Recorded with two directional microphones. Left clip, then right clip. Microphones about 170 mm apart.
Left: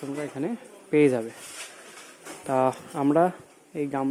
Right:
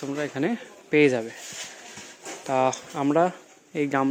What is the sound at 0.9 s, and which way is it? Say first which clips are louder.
Speech: right 1 dB; 15° left (ahead or behind).